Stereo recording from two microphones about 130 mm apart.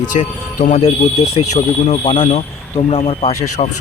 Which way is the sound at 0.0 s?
75° left (ahead or behind).